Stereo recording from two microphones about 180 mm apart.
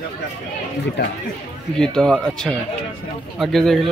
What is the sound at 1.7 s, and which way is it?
Speech, 5° left (ahead or behind).